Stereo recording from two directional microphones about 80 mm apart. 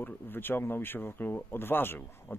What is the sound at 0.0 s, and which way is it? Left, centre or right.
Speech, left.